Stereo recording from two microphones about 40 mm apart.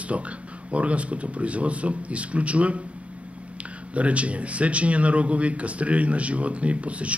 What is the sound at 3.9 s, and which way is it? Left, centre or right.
Speech, right.